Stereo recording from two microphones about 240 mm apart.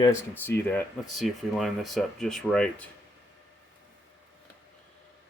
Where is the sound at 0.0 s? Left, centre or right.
Centre.